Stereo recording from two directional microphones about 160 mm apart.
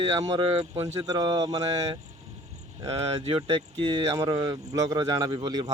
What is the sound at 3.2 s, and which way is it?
Speech, 35° right (ahead or behind).